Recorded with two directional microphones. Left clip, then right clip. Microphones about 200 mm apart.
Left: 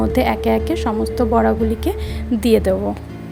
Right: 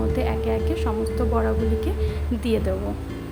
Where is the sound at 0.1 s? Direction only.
40° left (ahead or behind).